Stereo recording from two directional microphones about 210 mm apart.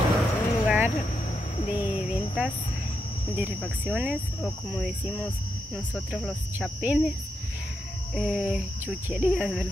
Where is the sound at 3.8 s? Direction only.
5° right (ahead or behind).